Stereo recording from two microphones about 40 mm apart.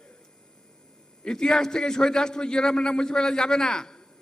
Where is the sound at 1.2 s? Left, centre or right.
Centre.